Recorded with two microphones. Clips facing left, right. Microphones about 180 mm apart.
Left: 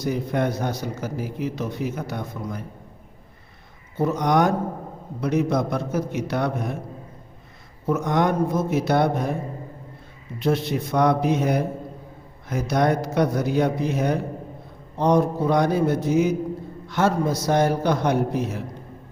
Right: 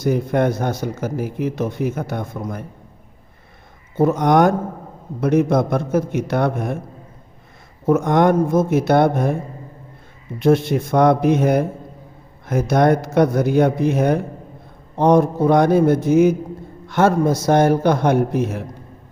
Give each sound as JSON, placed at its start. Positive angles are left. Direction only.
{"t": 0.0, "sound": "a man's voice", "side_deg": -50}
{"t": 3.9, "sound": "a man's voice", "side_deg": -50}
{"t": 7.9, "sound": "a man's voice", "side_deg": -50}
{"t": 10.4, "sound": "a man's voice", "side_deg": -50}